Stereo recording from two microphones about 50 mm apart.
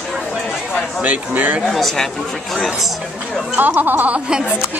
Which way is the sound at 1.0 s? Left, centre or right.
Right.